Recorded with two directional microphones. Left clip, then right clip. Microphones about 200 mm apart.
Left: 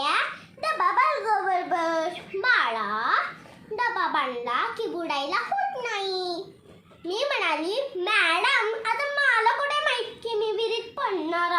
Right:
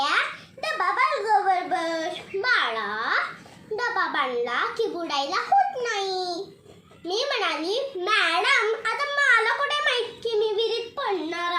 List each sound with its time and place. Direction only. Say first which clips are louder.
0.6 s child singing: left 1 dB; 15° left (ahead or behind)
3.8 s a child's voice: even; 15° left (ahead or behind)
5.8 s babbling: right 2 dB; 20° left (ahead or behind)
7.1 s a sound: even; 20° left (ahead or behind)